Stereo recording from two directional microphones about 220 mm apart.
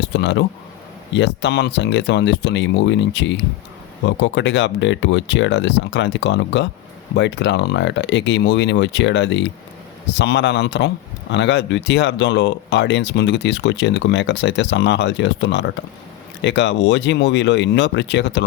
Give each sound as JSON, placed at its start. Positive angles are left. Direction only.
{"t": 0.0, "sound": "speech", "side_deg": 55}